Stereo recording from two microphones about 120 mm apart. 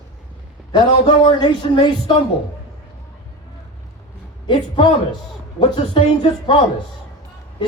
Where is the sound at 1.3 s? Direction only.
35° left (ahead or behind).